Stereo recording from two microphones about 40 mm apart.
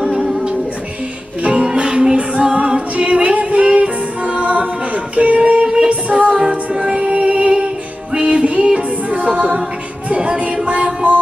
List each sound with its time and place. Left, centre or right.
1.4 s music: right
4.2 s a capella: right
5.9 s music: right
10.0 s music: right